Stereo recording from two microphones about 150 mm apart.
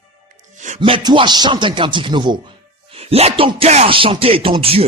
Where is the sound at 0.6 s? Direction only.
50° right (ahead or behind).